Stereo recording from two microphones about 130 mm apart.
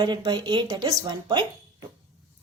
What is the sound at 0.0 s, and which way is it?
A woman's voice, 35° right (ahead or behind).